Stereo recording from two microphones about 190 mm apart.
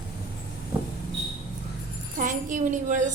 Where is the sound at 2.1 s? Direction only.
40° right (ahead or behind).